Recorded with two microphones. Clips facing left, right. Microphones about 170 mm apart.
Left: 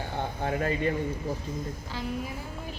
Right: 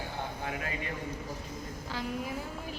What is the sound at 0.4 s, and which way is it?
Speech, 35° left (ahead or behind).